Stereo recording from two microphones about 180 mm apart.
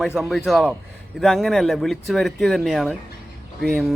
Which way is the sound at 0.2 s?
Centre (ahead or behind).